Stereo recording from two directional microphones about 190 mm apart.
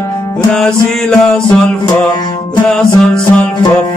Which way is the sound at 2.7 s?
5° left (ahead or behind).